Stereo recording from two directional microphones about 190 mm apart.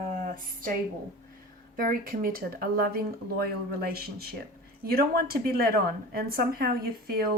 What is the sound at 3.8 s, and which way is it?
A woman's voice, 55° right (ahead or behind).